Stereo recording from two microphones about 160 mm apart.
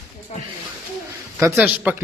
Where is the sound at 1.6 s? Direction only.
5° right (ahead or behind).